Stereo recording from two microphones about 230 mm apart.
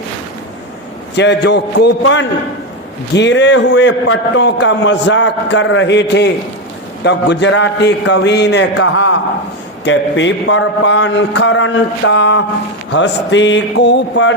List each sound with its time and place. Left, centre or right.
1.1 s a man's voice: left